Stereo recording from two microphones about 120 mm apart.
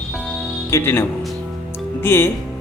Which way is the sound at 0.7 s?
20° left (ahead or behind).